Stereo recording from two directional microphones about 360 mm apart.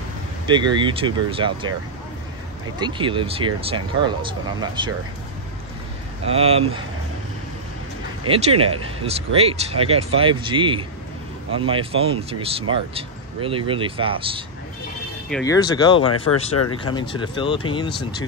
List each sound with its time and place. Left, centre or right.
0.5 s speech: centre
2.8 s speech: centre
6.2 s speech: centre
8.5 s speech: right
9.0 s speech: centre
15.2 s speech: centre
16.1 s speech: left
16.7 s speech: centre